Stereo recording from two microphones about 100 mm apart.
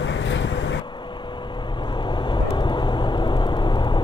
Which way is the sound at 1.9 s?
50° left (ahead or behind).